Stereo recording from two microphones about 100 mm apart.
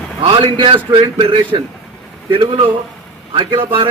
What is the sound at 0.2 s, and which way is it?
A man's voice, 60° right (ahead or behind).